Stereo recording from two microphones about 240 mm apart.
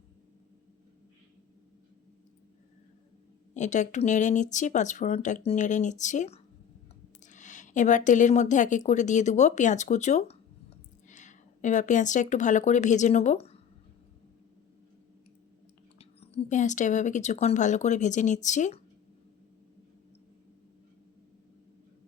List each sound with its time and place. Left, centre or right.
3.5 s a woman's voice: left
16.0 s speech: left